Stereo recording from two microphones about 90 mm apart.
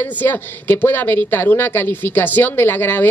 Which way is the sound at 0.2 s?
20° left (ahead or behind).